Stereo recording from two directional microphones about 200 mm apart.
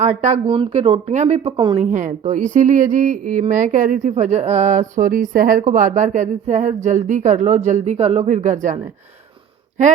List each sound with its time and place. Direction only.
0.0 s speech: 35° right (ahead or behind)
0.4 s speech: 25° right (ahead or behind)
1.8 s speech: 40° right (ahead or behind)